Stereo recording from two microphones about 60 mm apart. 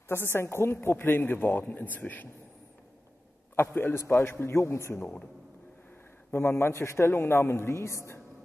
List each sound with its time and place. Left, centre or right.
0.1 s a woman's voice: left
3.7 s a man's voice: left
6.3 s a man's voice: left